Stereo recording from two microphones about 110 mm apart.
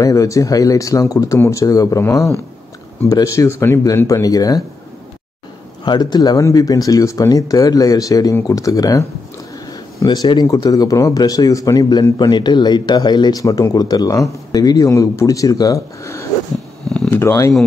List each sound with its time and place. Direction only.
0.0 s speech: 30° left (ahead or behind)
5.9 s speech: 40° left (ahead or behind)